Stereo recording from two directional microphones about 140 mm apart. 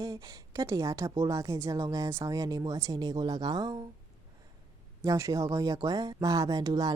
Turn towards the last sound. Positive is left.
turn(degrees=-25)  # may be behind; listen again after turning